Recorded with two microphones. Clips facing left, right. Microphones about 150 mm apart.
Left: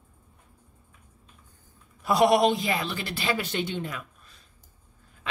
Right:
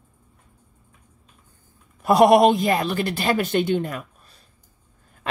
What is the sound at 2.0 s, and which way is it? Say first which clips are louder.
A woman's voice: right 6 dB; 55° right (ahead or behind).